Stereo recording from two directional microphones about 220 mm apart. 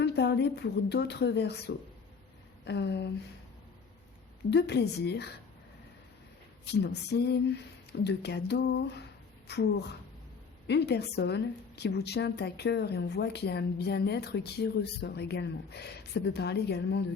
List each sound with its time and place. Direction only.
0.0 s a woman's voice: 50° left (ahead or behind)
4.5 s a woman's voice: 50° left (ahead or behind)
6.8 s a woman's voice: 45° left (ahead or behind)
10.7 s a woman's voice: 50° left (ahead or behind)